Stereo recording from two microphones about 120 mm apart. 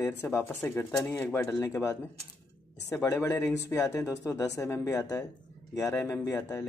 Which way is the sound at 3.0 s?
25° left (ahead or behind).